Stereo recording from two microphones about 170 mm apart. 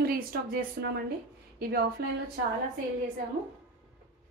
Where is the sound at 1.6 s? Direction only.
60° right (ahead or behind).